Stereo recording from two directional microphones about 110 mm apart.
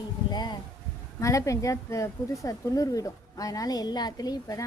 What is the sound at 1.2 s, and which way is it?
A woman's voice, 30° left (ahead or behind).